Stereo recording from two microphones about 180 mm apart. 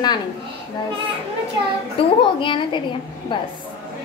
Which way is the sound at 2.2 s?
25° left (ahead or behind).